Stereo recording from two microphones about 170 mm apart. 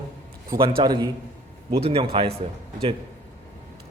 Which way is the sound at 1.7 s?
35° right (ahead or behind).